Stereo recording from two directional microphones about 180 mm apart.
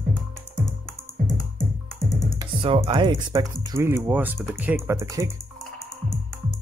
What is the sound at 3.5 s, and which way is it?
Speech, 15° right (ahead or behind).